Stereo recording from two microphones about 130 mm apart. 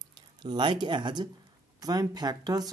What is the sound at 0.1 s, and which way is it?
Speech, 35° right (ahead or behind).